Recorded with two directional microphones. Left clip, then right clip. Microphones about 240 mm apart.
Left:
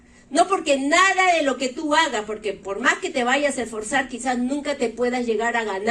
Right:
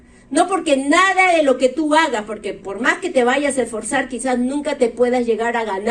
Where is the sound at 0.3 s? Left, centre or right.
Right.